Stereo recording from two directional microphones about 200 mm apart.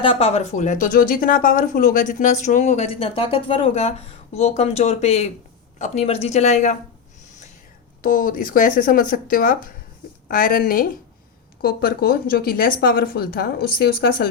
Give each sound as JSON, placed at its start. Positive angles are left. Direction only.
{"t": 0.0, "sound": "speech", "side_deg": 30}
{"t": 8.0, "sound": "a woman's voice", "side_deg": 45}